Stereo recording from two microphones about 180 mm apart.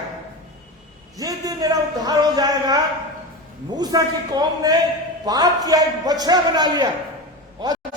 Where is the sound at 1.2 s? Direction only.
20° right (ahead or behind).